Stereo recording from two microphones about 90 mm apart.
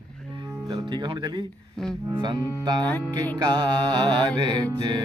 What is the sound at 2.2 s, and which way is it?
Music, 50° right (ahead or behind).